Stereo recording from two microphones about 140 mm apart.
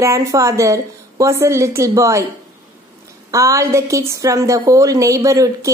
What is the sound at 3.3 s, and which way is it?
A woman's voice, 20° right (ahead or behind).